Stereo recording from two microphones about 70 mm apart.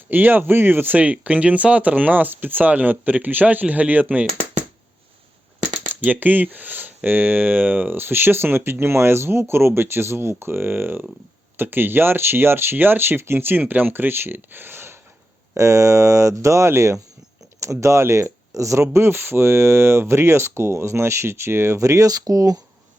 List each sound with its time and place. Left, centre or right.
0.1 s speech: right
5.9 s speech: right
15.5 s speech: right